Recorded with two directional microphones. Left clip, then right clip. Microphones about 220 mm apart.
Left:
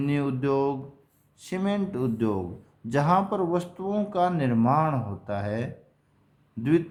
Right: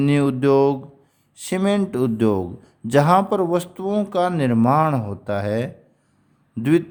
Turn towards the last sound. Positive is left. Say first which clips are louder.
# right 5 dB
turn(degrees=-50)  # may be behind; listen again after turning